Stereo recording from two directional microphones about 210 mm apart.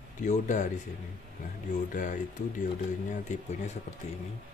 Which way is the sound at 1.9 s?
40° left (ahead or behind).